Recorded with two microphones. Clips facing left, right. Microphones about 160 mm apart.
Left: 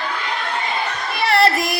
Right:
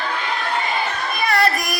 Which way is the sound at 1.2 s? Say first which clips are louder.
Left 3 dB; 30° left (ahead or behind).